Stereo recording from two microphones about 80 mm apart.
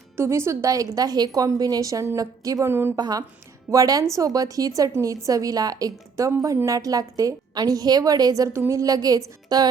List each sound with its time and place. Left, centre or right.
0.2 s a woman's voice: right
2.6 s a woman's voice: right
2.9 s a woman's voice: right
8.8 s a woman's voice: right